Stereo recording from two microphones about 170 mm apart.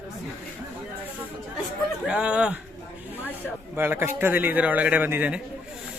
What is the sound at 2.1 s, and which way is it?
Speech, 5° right (ahead or behind).